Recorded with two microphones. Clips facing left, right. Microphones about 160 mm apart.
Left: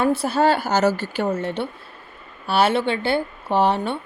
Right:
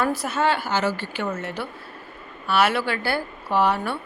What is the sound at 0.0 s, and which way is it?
A woman's voice, 30° left (ahead or behind).